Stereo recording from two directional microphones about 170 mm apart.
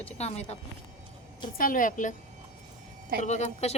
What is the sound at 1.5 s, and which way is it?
Speech, 55° left (ahead or behind).